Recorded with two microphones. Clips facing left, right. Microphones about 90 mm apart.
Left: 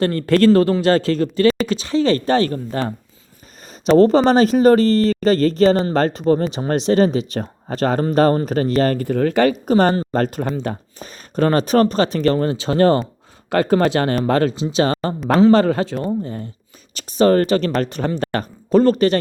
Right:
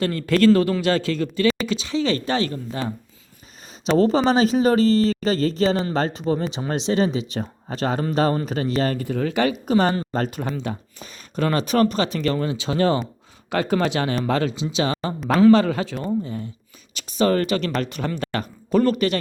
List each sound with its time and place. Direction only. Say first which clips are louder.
0.0 s speech: left 3 dB; 40° left (ahead or behind)
3.9 s speech: left 5 dB; 45° left (ahead or behind)